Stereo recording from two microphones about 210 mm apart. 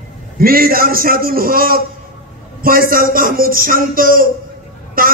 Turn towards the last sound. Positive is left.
turn(degrees=-45)  # may be behind; listen again after turning